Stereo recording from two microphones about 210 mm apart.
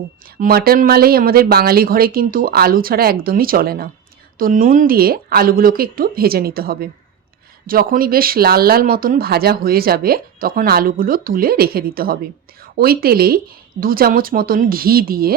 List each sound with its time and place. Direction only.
0.3 s speech: 45° right (ahead or behind)